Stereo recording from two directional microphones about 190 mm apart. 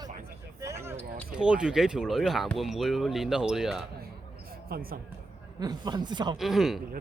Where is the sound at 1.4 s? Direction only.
5° right (ahead or behind).